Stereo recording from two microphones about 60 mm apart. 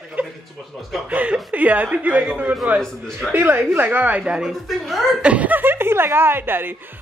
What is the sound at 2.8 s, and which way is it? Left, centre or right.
Speech, centre.